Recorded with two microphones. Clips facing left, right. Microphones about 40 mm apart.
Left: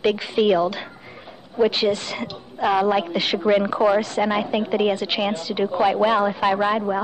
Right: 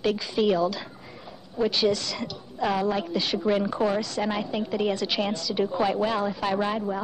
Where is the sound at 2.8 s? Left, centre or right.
Left.